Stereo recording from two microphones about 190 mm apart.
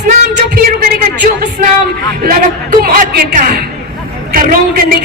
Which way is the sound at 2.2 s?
50° right (ahead or behind).